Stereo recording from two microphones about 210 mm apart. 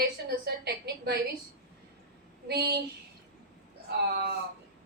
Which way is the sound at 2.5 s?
50° right (ahead or behind).